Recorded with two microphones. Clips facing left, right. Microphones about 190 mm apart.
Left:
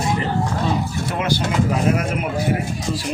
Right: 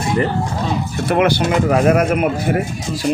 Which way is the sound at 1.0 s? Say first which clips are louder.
Right 11 dB; 65° right (ahead or behind).